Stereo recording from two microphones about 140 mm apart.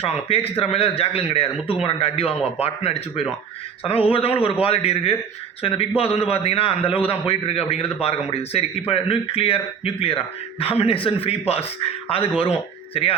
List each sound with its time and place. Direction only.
0.0 s a man's voice: 45° left (ahead or behind)